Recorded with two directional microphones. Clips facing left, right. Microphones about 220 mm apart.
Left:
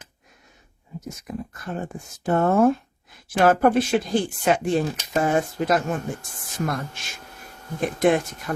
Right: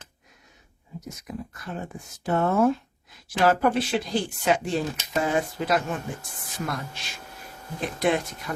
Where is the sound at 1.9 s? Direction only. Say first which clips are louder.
Left 3 dB; 50° left (ahead or behind).